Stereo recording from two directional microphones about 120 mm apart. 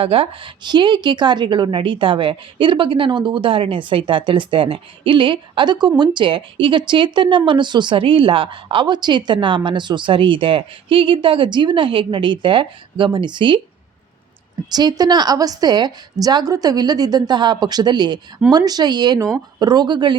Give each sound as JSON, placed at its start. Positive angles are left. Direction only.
{"t": 0.0, "sound": "speech", "side_deg": -50}
{"t": 14.7, "sound": "a woman's voice", "side_deg": -35}